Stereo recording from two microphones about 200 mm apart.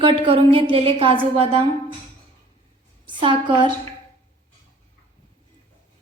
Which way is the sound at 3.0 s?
25° right (ahead or behind).